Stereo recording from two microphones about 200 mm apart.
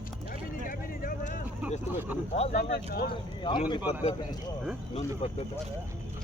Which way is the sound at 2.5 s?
50° left (ahead or behind).